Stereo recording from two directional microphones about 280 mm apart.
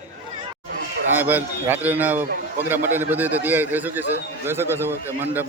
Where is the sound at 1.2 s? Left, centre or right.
Centre.